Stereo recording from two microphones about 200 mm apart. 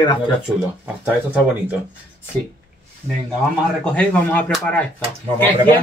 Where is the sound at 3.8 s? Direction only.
5° left (ahead or behind).